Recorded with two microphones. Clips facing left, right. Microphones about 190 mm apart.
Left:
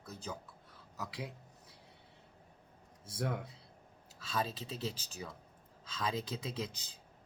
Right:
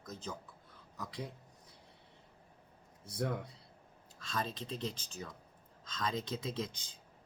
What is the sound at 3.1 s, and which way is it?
Speech, centre (ahead or behind).